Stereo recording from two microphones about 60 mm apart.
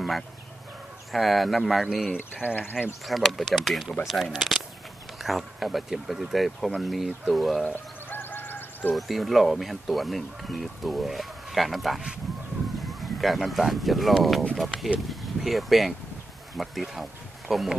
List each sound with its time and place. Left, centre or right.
1.1 s speech: centre
2.1 s speech: left
3.1 s speech: centre
7.6 s honk: left
8.9 s speech: centre
13.0 s speech: centre